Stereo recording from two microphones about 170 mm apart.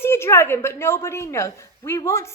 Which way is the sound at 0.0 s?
15° left (ahead or behind).